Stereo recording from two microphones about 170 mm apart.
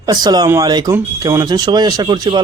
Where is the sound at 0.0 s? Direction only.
25° right (ahead or behind).